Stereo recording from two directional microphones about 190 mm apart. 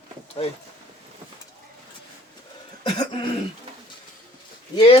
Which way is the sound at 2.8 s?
25° left (ahead or behind).